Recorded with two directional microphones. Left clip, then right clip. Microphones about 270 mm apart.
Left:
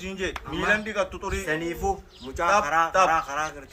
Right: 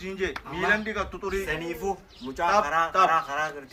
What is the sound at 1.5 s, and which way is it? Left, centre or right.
A man's voice, centre.